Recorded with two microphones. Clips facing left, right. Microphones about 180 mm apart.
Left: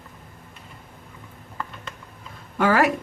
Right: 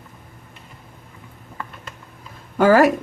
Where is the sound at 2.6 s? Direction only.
40° right (ahead or behind).